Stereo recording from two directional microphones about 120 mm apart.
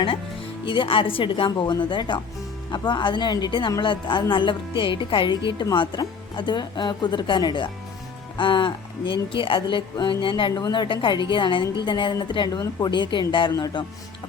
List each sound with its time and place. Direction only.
0.6 s a woman's voice: 45° left (ahead or behind)